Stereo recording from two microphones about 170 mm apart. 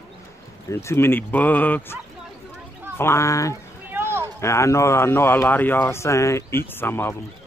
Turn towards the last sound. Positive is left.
turn(degrees=15)  # may be behind; listen again after turning